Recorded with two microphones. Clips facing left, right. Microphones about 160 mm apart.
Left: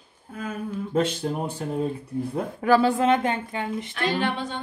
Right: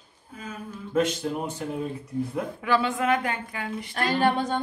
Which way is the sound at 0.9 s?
30° left (ahead or behind).